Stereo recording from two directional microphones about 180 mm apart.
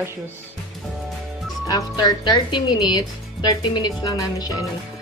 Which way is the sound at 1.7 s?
20° left (ahead or behind).